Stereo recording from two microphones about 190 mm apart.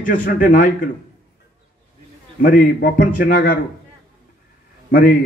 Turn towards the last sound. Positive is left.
turn(degrees=50)  # may be behind; listen again after turning